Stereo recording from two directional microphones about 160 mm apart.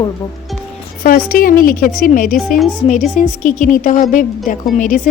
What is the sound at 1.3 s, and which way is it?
A woman's voice, 60° left (ahead or behind).